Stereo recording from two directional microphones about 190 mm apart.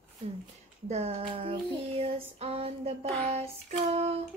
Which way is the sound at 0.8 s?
35° right (ahead or behind).